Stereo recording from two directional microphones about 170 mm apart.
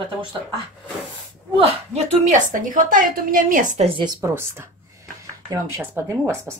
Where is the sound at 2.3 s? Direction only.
50° right (ahead or behind).